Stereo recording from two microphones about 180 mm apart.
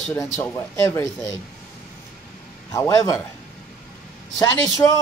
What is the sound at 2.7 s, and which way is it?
Speech, 15° left (ahead or behind).